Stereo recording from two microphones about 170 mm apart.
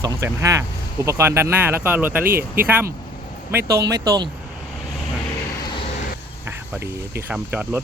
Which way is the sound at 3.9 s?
20° right (ahead or behind).